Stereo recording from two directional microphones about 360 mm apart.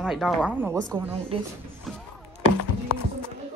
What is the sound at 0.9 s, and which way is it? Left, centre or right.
Speech, centre.